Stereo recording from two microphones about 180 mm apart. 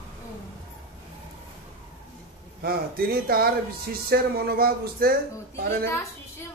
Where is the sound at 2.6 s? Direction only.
55° right (ahead or behind).